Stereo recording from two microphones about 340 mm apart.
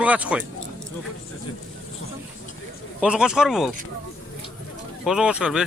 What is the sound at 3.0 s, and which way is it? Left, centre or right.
Speech, centre.